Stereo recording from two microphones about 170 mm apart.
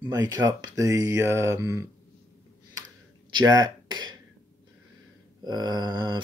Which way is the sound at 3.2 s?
25° right (ahead or behind).